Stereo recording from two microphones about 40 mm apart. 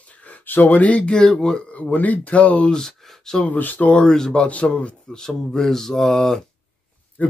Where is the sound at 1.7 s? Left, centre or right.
Left.